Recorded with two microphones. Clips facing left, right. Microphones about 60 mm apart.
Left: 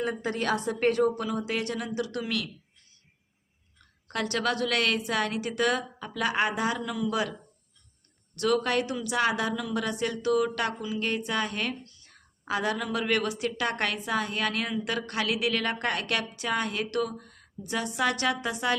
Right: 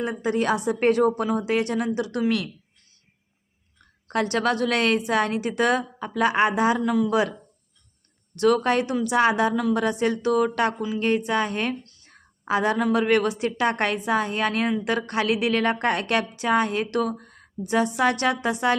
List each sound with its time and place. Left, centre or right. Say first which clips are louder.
0.0 s a woman's voice: right 5 dB; centre
4.1 s a woman's voice: right 6 dB; right
8.4 s a woman's voice: right 6 dB; right